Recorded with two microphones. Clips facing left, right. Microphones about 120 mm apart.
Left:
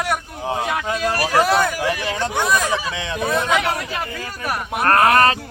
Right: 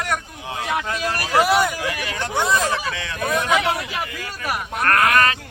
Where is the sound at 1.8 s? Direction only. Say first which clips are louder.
Left 4 dB; 25° left (ahead or behind).